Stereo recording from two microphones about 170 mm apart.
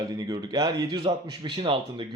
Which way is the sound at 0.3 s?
25° right (ahead or behind).